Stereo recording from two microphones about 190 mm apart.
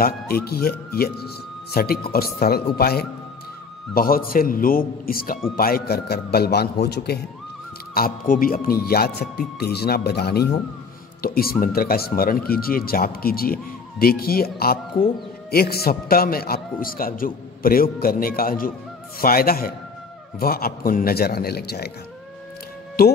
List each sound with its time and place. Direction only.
0.0 s speech: 55° left (ahead or behind)
23.0 s speech: 55° left (ahead or behind)